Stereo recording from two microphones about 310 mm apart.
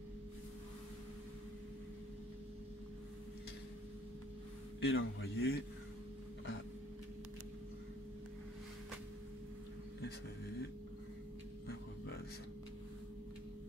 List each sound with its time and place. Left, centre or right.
4.7 s a man's voice: left